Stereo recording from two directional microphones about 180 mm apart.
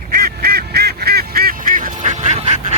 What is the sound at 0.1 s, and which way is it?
Goose, 60° right (ahead or behind).